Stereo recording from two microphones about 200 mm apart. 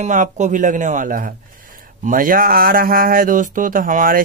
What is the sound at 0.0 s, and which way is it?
Speech, 35° right (ahead or behind).